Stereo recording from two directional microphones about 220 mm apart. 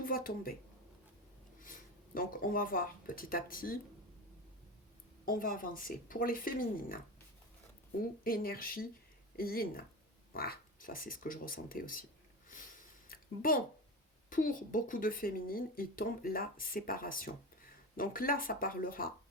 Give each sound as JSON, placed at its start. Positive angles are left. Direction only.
{"t": 0.0, "sound": "speech", "side_deg": 40}
{"t": 2.1, "sound": "speech", "side_deg": 40}
{"t": 5.2, "sound": "speech", "side_deg": 40}
{"t": 8.2, "sound": "speech", "side_deg": 40}
{"t": 13.1, "sound": "a sound", "side_deg": 40}
{"t": 14.3, "sound": "speech", "side_deg": 40}